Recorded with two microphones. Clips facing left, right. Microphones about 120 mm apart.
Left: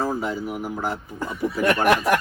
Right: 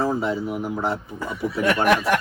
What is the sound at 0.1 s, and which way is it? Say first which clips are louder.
Speech: right 2 dB; 25° right (ahead or behind).